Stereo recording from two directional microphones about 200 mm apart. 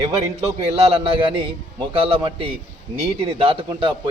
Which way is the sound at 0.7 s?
30° right (ahead or behind).